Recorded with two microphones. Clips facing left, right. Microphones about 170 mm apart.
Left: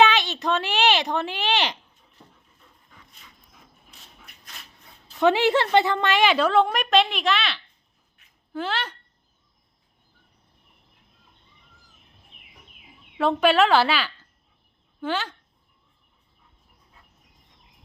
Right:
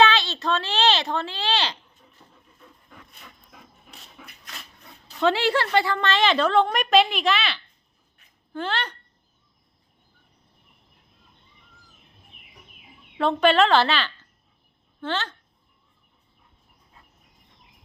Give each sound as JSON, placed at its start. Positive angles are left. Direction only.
{"t": 0.0, "sound": "a child's voice", "side_deg": 15}
{"t": 3.1, "sound": "dog", "side_deg": -65}
{"t": 5.2, "sound": "a woman's voice", "side_deg": 20}
{"t": 13.1, "sound": "a woman's voice", "side_deg": 5}